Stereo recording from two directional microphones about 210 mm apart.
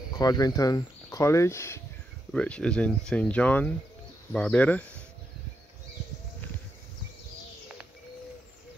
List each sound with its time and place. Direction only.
0.2 s speech: 20° left (ahead or behind)